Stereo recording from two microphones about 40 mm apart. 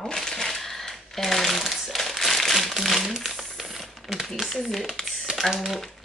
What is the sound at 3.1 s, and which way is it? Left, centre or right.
Crumpling, centre.